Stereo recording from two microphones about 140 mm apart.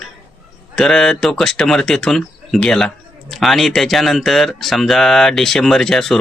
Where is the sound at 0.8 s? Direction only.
5° left (ahead or behind).